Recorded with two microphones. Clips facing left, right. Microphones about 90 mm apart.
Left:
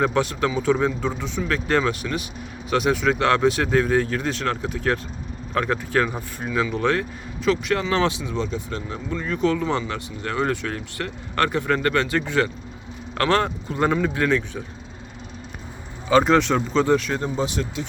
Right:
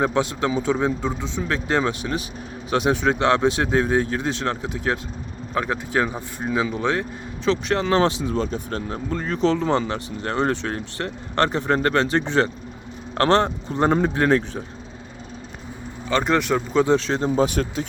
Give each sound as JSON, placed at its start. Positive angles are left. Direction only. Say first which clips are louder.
{"t": 0.0, "sound": "speech", "louder": "even", "side_deg": -20}
{"t": 16.0, "sound": "speech", "louder": "left 3 dB", "side_deg": 5}
{"t": 16.8, "sound": "speech", "louder": "right 1 dB", "side_deg": -25}
{"t": 17.3, "sound": "speech", "louder": "right 4 dB", "side_deg": -50}